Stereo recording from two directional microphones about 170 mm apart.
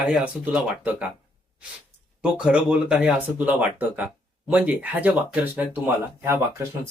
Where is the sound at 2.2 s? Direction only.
5° right (ahead or behind).